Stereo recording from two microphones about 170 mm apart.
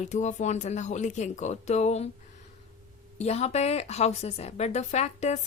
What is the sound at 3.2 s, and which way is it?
Speech, 40° left (ahead or behind).